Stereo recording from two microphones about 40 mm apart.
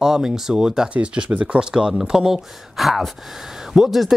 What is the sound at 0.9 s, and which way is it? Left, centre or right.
Speech, right.